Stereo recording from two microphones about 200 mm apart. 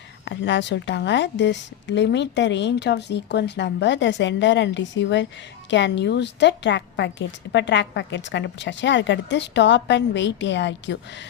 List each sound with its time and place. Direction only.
0.3 s a woman's voice: 65° left (ahead or behind)